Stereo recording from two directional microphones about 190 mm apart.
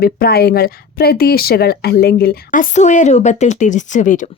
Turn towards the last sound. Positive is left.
turn(degrees=40)  # may be behind; listen again after turning